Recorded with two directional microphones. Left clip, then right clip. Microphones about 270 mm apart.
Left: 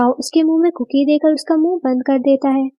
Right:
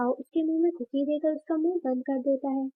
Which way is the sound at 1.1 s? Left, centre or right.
Left.